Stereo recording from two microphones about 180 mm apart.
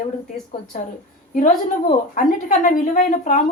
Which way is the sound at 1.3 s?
45° left (ahead or behind).